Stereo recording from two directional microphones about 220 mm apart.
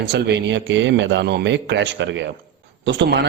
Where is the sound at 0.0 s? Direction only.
50° right (ahead or behind).